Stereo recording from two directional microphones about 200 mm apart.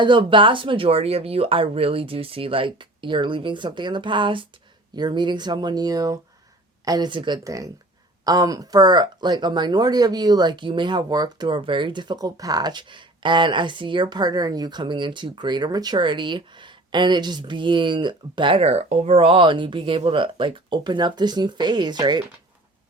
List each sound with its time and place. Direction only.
0.0 s speech: 25° right (ahead or behind)